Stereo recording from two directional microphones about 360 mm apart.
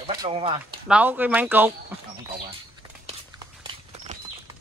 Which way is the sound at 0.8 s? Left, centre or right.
Centre.